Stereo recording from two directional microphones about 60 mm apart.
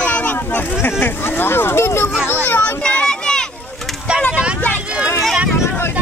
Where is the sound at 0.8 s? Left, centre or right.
Left.